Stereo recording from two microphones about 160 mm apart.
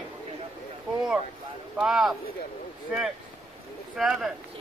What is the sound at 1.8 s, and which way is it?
Speech, centre (ahead or behind).